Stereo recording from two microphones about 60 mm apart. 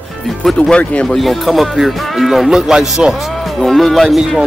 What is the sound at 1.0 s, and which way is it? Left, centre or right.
Speech, centre.